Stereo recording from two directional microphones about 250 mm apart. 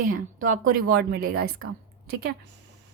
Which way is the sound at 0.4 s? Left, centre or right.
Right.